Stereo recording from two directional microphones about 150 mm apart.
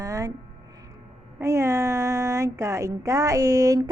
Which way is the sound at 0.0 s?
20° right (ahead or behind).